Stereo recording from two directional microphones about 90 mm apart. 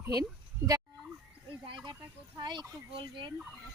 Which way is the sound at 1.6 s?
55° right (ahead or behind).